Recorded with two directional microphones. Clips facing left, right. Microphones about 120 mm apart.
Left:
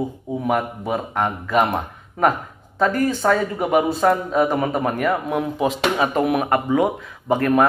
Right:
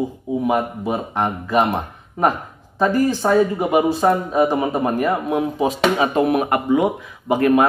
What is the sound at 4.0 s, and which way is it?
Speech, 15° right (ahead or behind).